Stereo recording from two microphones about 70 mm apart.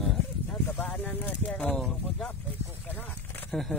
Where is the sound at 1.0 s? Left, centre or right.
Left.